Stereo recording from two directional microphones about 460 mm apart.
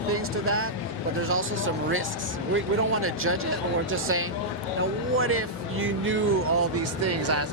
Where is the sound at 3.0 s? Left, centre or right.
Right.